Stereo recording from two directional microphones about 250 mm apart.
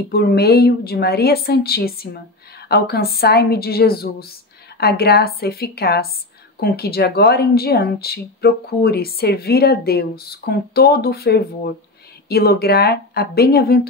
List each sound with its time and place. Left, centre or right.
0.1 s speech: left